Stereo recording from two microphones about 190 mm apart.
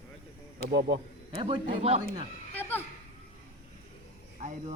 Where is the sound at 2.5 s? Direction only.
10° left (ahead or behind).